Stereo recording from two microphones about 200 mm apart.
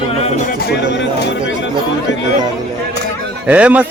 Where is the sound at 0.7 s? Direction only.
60° left (ahead or behind).